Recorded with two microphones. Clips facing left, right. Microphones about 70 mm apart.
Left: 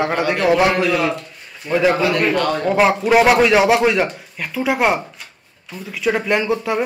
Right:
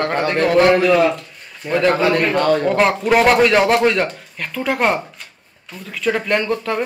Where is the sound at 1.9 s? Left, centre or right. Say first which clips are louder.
Right 1 dB; right.